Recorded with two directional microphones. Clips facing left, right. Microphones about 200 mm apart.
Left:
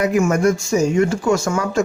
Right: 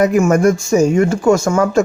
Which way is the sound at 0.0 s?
45° right (ahead or behind).